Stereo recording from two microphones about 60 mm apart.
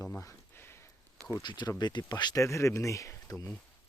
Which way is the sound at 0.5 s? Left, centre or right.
Left.